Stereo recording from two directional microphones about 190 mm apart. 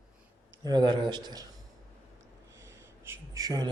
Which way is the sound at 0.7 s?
25° right (ahead or behind).